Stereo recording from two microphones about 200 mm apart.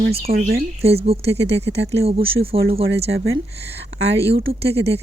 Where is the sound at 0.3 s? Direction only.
50° right (ahead or behind).